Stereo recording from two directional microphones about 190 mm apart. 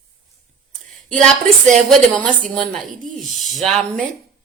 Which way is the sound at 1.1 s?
Centre (ahead or behind).